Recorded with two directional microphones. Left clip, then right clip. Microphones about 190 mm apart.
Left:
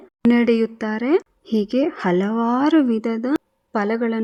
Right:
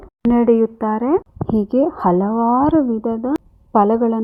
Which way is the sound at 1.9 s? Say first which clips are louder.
Right 4 dB; 25° left (ahead or behind).